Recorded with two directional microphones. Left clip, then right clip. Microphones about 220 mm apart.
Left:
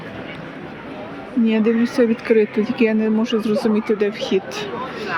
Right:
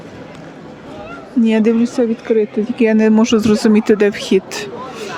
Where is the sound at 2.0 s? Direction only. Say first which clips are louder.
Right 1 dB; 15° right (ahead or behind).